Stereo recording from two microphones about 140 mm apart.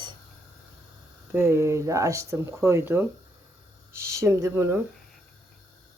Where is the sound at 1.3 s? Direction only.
15° right (ahead or behind).